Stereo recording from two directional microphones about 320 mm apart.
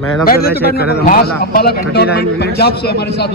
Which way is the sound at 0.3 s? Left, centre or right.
Left.